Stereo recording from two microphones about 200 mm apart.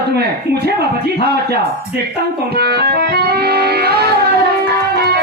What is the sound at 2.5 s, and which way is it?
Music, 50° right (ahead or behind).